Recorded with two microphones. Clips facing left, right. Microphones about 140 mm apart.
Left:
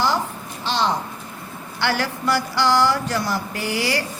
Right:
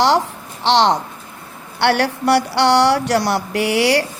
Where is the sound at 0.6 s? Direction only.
80° right.